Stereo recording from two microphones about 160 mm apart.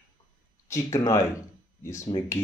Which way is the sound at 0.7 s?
20° left (ahead or behind).